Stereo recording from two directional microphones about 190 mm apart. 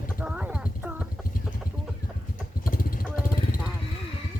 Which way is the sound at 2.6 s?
50° left (ahead or behind).